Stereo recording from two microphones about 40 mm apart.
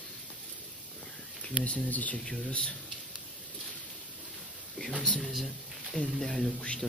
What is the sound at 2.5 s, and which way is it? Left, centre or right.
Speech, left.